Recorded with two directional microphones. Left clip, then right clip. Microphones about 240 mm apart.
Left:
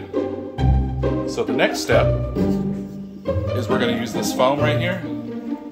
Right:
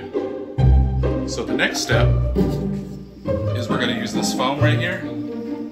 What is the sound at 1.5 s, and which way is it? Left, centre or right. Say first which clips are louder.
Speech: left 2 dB; left.